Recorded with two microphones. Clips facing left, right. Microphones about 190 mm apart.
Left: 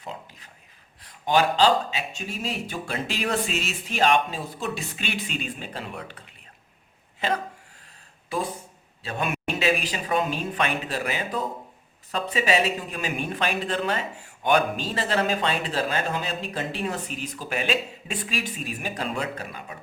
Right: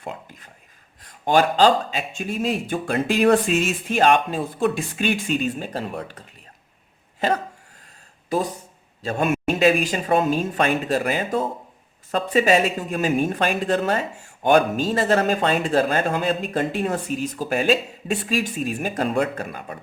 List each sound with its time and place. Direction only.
0.0 s speech: 50° right (ahead or behind)
9.0 s speech: 45° right (ahead or behind)